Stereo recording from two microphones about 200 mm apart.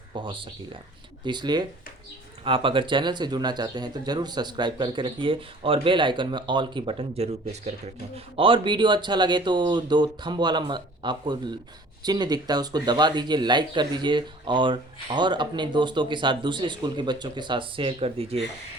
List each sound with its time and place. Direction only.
0.1 s speech: 25° right (ahead or behind)